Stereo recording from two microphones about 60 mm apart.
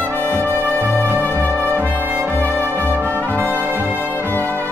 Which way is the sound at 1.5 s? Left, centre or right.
Right.